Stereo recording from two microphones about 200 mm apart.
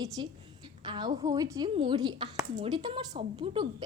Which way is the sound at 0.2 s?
25° right (ahead or behind).